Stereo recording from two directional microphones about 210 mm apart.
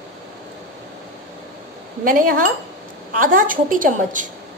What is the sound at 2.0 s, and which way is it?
Speech, 40° right (ahead or behind).